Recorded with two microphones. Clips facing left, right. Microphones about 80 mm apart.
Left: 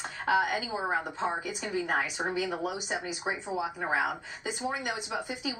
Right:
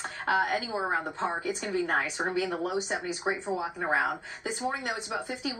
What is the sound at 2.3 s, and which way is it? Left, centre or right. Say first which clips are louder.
A woman's voice: right 2 dB; right.